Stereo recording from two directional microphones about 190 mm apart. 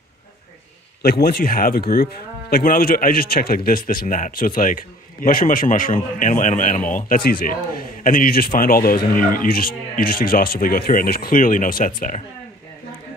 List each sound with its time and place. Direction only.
1.0 s a man's voice: 55° left (ahead or behind)